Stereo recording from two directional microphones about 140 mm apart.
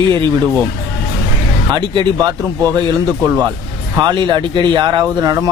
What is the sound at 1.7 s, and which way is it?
Speech, 30° right (ahead or behind).